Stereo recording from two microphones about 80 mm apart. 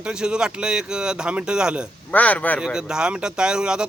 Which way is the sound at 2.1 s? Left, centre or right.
Centre.